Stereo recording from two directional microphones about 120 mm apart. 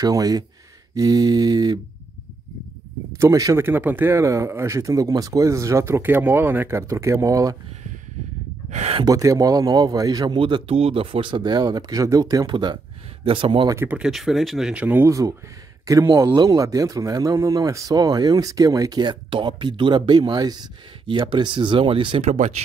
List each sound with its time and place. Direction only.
0.0 s speech: 30° right (ahead or behind)
3.2 s speech: 30° right (ahead or behind)
3.6 s speech: 15° right (ahead or behind)
8.6 s a sound: 70° right (ahead or behind)
9.0 s speech: 30° right (ahead or behind); by 13.7 s 45° right (ahead or behind)
13.7 s speech: 20° right (ahead or behind)
13.9 s speech: 5° right (ahead or behind)
15.0 s speech: 25° right (ahead or behind); by 22.2 s 45° right (ahead or behind)
22.2 s speech: 75° right (ahead or behind)